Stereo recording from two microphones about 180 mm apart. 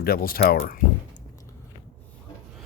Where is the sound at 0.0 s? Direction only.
55° left (ahead or behind).